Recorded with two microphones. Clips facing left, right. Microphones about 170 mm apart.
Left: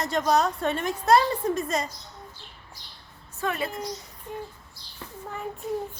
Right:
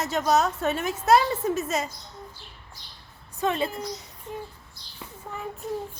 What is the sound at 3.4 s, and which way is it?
Speech, 25° right (ahead or behind).